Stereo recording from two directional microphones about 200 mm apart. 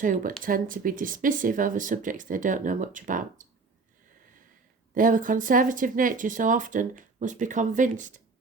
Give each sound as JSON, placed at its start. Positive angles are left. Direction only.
{"t": 0.0, "sound": "speech", "side_deg": -40}
{"t": 4.9, "sound": "speech", "side_deg": -40}